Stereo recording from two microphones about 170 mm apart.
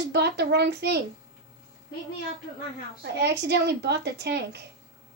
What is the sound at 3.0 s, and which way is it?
A woman's voice, 85° right.